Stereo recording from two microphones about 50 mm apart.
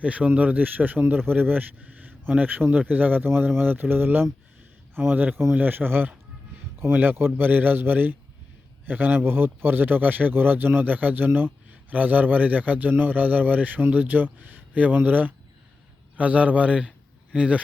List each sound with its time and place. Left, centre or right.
0.0 s a man's voice: right
3.2 s a man's voice: right
11.3 s a man's voice: right
11.7 s a man's voice: right